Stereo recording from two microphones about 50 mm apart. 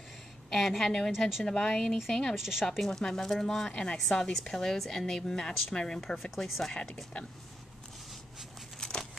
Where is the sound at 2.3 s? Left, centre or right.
Centre.